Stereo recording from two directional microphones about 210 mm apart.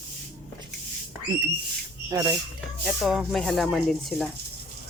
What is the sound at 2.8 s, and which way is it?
Speech, centre (ahead or behind).